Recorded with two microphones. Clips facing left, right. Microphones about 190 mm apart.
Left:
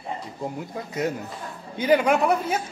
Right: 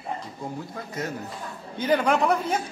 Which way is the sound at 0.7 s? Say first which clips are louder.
Left 5 dB; 20° left (ahead or behind).